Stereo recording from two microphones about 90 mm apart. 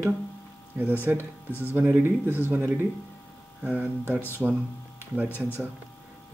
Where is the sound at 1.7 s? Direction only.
20° right (ahead or behind).